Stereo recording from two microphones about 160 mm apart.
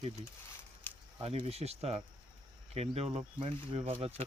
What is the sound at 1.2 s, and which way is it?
Speech, 40° right (ahead or behind).